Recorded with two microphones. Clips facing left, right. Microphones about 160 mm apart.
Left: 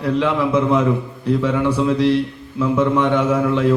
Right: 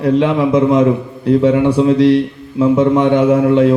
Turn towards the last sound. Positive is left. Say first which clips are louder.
# right 6 dB
turn(degrees=-30)  # may be behind; listen again after turning